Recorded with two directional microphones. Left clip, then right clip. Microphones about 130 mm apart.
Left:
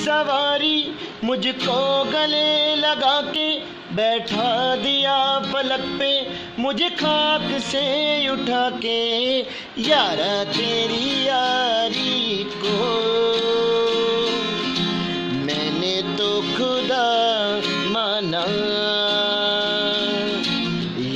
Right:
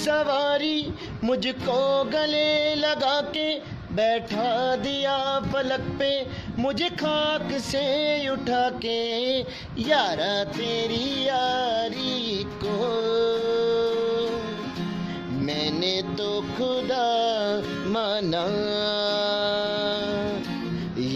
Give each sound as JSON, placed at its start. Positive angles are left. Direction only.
{"t": 0.0, "sound": "music", "side_deg": -50}
{"t": 8.9, "sound": "a sound", "side_deg": -30}
{"t": 9.8, "sound": "music", "side_deg": -30}
{"t": 15.8, "sound": "music", "side_deg": -30}
{"t": 18.9, "sound": "music", "side_deg": -90}